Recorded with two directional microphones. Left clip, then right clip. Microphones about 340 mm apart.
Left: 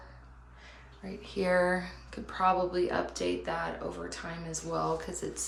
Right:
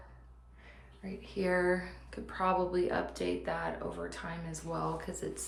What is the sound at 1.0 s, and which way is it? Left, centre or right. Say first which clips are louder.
Speech: left 3 dB; centre.